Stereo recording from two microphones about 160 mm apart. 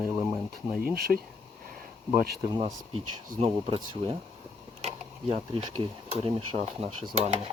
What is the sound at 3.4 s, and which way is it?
Speech, 35° right (ahead or behind).